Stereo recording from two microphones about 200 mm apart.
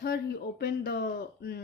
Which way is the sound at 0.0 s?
55° left (ahead or behind).